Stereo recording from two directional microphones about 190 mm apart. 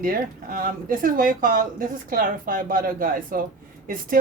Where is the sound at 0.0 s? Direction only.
50° right (ahead or behind).